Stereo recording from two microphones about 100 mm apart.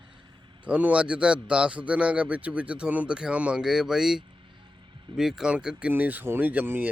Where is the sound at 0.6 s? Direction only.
15° right (ahead or behind).